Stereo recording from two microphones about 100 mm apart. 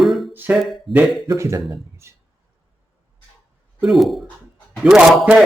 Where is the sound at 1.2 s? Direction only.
30° right (ahead or behind).